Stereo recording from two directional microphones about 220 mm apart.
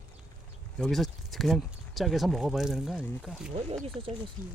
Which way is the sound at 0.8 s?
Centre (ahead or behind).